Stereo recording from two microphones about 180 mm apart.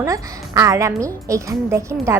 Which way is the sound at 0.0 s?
20° right (ahead or behind).